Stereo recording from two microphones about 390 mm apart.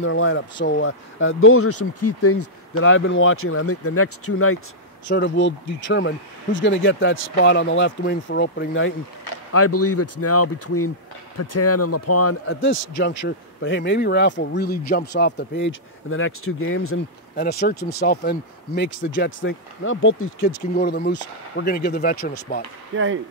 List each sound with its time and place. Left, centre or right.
0.0 s a man's voice: left
22.9 s speech: right